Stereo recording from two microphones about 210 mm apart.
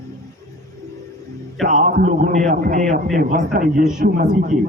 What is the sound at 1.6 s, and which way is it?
A man's voice, 35° right (ahead or behind).